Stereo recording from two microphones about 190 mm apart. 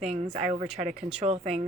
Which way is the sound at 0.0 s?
35° right (ahead or behind).